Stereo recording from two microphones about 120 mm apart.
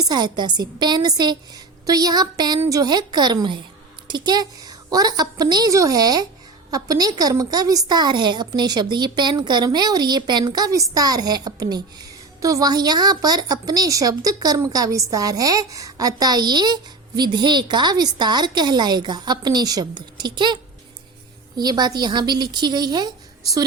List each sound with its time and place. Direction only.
0.0 s a woman's voice: 35° right (ahead or behind)